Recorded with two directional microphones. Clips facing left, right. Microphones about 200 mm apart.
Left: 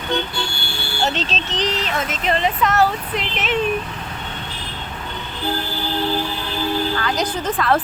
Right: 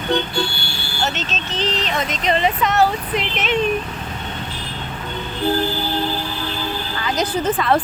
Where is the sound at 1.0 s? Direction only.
30° left (ahead or behind).